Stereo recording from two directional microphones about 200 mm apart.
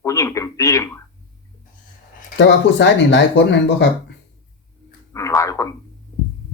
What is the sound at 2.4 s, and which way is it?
Speech, 60° left (ahead or behind).